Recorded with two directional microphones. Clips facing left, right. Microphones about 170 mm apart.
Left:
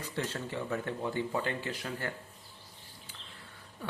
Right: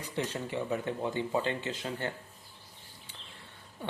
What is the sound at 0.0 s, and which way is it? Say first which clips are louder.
Speech: right 2 dB; 15° right (ahead or behind).